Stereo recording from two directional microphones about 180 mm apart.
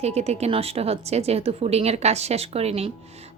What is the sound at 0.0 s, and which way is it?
Speech, 35° right (ahead or behind).